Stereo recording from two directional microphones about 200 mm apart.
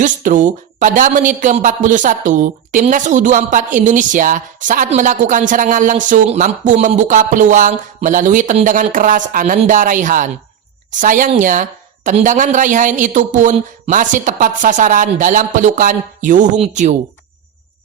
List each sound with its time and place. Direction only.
0.0 s speech: 40° right (ahead or behind)